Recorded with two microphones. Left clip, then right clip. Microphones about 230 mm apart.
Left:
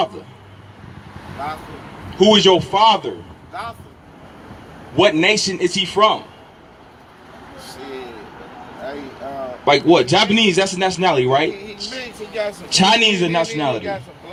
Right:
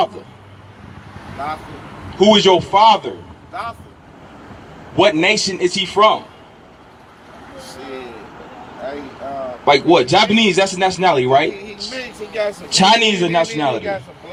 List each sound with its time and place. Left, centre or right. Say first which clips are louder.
2.1 s a man's voice: right 1 dB; left
3.5 s speech: right 3 dB; centre
4.9 s a man's voice: right 1 dB; left
9.6 s a man's voice: right 1 dB; left
11.9 s speech: right 3 dB; centre
12.7 s a man's voice: right 1 dB; left